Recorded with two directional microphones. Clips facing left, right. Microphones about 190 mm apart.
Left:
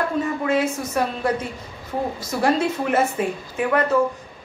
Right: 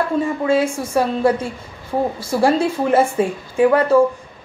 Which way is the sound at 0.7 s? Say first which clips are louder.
Right 5 dB; 30° right (ahead or behind).